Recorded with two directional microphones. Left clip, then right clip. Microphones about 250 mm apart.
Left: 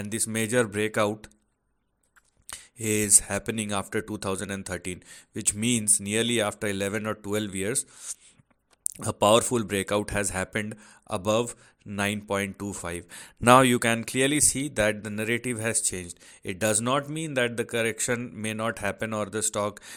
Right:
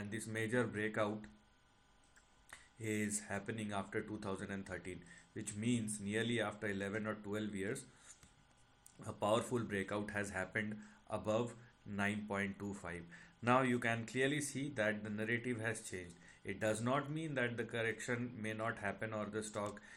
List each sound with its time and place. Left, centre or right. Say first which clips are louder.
0.0 s speech: left 12 dB; left
2.5 s speech: left 14 dB; left